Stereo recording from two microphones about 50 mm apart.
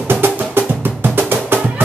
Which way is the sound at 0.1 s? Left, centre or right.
Right.